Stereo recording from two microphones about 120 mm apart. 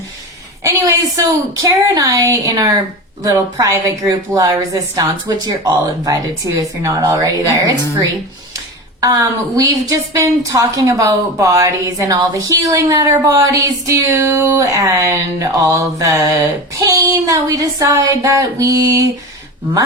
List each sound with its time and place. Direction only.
0.6 s a sound: 25° right (ahead or behind)
1.6 s a woman's voice: 30° right (ahead or behind)
9.0 s a woman's voice: 30° right (ahead or behind)